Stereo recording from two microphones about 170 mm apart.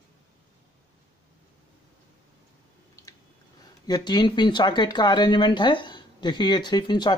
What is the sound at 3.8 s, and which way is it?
Speech, 25° left (ahead or behind).